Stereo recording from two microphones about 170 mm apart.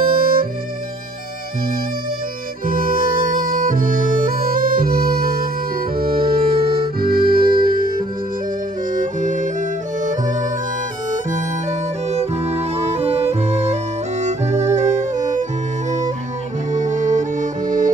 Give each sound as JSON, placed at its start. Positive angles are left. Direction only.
{"t": 0.0, "sound": "music", "side_deg": -60}
{"t": 2.6, "sound": "music", "side_deg": -55}
{"t": 8.9, "sound": "music", "side_deg": -50}
{"t": 12.1, "sound": "music", "side_deg": -40}
{"t": 16.7, "sound": "music", "side_deg": -45}